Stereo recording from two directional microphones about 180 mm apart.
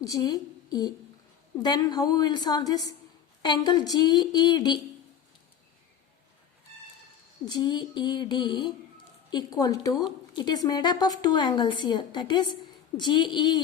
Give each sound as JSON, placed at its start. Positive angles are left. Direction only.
{"t": 0.0, "sound": "a woman's voice", "side_deg": 20}
{"t": 7.4, "sound": "a woman's voice", "side_deg": 25}